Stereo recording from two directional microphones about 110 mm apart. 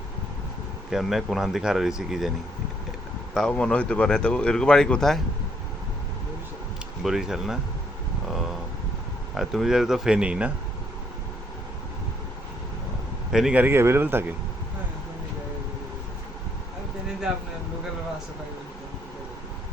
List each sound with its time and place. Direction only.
0.9 s speech: centre (ahead or behind)
3.3 s speech: 10° left (ahead or behind)
7.0 s speech: 5° right (ahead or behind)
9.3 s speech: centre (ahead or behind)
13.3 s a man's voice: 10° right (ahead or behind)